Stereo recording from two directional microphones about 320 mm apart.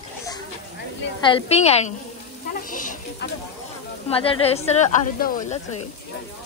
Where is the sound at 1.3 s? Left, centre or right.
Centre.